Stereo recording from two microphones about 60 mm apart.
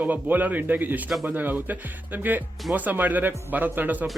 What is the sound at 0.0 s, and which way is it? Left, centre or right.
Speech, right.